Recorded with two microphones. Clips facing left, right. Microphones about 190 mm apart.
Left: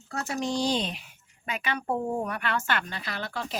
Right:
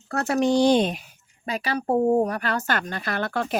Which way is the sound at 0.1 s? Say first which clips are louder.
Right 9 dB; 60° right (ahead or behind).